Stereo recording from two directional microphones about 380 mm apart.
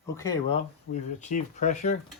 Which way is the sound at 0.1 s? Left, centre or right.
Centre.